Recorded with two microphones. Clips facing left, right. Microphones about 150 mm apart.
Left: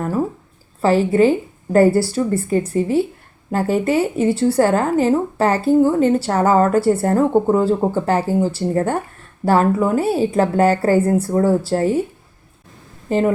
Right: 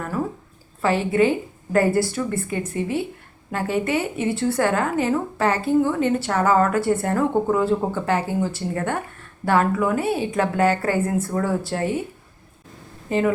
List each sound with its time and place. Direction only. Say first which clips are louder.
0.8 s speech: left 5 dB; 35° left (ahead or behind)
13.1 s speech: left 4 dB; 35° left (ahead or behind)